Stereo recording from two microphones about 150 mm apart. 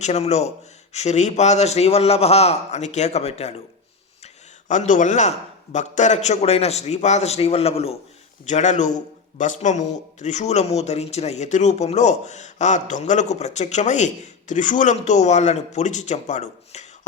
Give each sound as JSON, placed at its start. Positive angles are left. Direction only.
{"t": 0.0, "sound": "speech", "side_deg": 50}
{"t": 4.7, "sound": "speech", "side_deg": 55}
{"t": 8.4, "sound": "speech", "side_deg": 55}